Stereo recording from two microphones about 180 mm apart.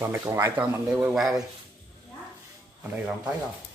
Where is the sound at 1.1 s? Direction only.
Centre (ahead or behind).